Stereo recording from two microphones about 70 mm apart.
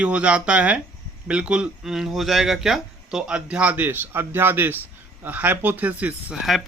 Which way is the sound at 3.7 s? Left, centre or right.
Right.